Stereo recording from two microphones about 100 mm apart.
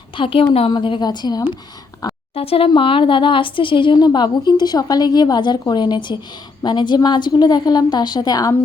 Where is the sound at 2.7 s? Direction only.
60° left (ahead or behind); by 8.5 s 40° left (ahead or behind).